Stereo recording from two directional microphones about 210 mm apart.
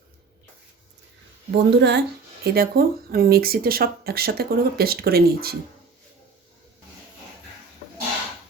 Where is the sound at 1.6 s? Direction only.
55° right (ahead or behind).